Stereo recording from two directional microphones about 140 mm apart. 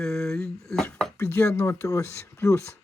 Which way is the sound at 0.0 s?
5° left (ahead or behind).